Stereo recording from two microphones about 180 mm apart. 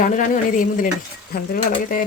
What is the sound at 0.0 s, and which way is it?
Speech, 45° left (ahead or behind).